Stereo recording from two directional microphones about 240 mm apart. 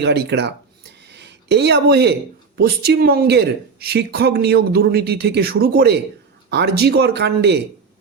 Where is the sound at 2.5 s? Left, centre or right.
Right.